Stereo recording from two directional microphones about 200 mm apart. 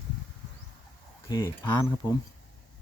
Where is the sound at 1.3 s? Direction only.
20° left (ahead or behind).